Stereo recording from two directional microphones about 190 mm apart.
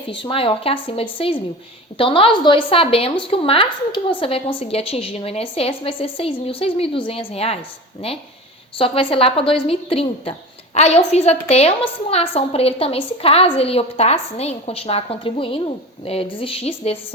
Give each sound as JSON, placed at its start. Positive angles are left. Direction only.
{"t": 0.1, "sound": "a woman's voice", "side_deg": 25}
{"t": 8.8, "sound": "a woman's voice", "side_deg": 30}